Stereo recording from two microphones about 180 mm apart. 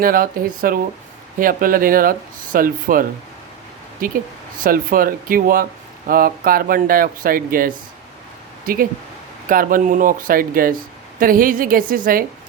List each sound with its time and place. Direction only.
0.0 s speech: 50° right (ahead or behind)